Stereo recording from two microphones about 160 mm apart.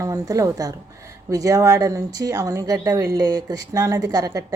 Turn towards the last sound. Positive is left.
turn(degrees=-25)  # may be behind; listen again after turning